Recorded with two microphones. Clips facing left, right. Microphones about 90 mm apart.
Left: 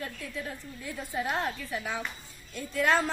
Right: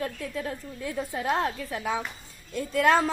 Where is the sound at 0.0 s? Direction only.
50° right (ahead or behind).